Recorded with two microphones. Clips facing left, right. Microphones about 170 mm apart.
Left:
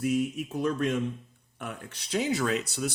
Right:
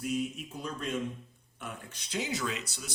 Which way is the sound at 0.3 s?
70° left (ahead or behind).